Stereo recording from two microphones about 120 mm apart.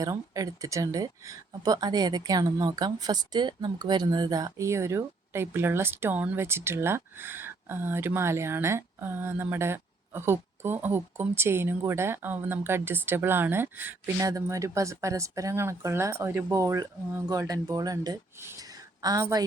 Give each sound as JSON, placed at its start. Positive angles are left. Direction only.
{"t": 0.0, "sound": "speech", "side_deg": -30}
{"t": 14.2, "sound": "a woman's voice", "side_deg": -30}